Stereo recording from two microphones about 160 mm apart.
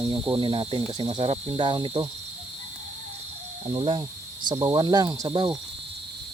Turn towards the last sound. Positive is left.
turn(degrees=-25)  # may be behind; listen again after turning